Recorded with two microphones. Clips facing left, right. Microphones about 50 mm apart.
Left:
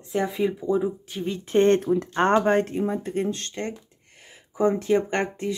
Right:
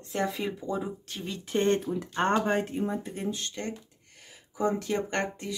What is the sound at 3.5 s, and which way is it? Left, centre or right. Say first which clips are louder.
Speech: left 4 dB; left.